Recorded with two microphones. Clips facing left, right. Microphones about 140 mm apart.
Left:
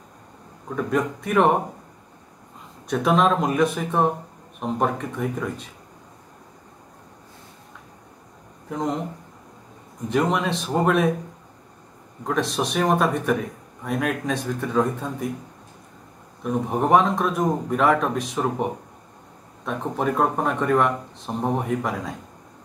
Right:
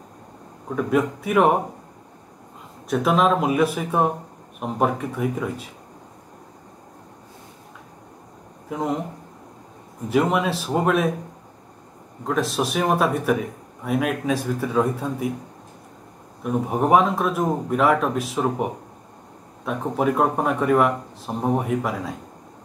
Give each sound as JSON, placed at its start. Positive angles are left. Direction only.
{"t": 0.7, "sound": "speech", "side_deg": -5}
{"t": 2.9, "sound": "speech", "side_deg": 0}
{"t": 8.6, "sound": "speech", "side_deg": -5}
{"t": 10.0, "sound": "speech", "side_deg": -5}
{"t": 12.3, "sound": "speech", "side_deg": 0}
{"t": 16.6, "sound": "speech", "side_deg": -5}